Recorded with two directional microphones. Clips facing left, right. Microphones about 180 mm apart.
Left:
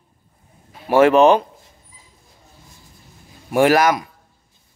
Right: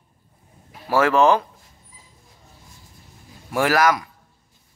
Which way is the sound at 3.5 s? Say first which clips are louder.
Left 4 dB; 25° left (ahead or behind).